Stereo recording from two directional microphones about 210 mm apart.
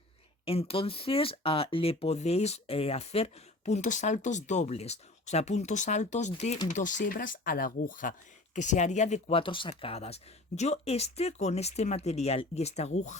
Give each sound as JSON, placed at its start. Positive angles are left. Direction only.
{"t": 0.4, "sound": "speech", "side_deg": 25}